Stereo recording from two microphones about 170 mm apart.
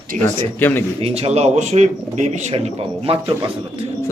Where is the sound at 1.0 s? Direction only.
40° right (ahead or behind).